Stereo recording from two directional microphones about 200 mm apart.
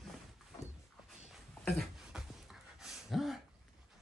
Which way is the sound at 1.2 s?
Centre (ahead or behind).